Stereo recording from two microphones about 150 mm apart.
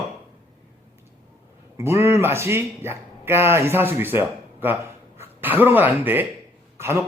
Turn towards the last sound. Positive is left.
turn(degrees=-15)  # may be behind; listen again after turning